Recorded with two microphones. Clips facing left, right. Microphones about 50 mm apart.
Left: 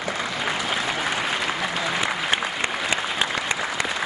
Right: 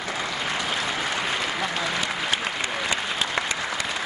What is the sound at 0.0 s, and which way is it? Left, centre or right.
Applause, centre.